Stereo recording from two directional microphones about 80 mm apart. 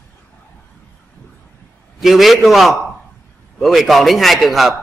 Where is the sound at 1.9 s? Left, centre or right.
Centre.